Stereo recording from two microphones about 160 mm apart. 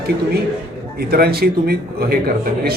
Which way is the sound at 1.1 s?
75° right (ahead or behind).